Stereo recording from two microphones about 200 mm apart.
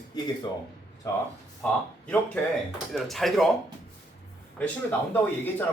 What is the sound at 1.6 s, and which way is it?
Speech, 5° left (ahead or behind).